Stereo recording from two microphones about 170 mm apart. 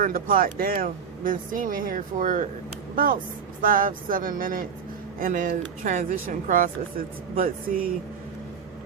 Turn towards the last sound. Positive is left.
turn(degrees=-55)  # may be behind; listen again after turning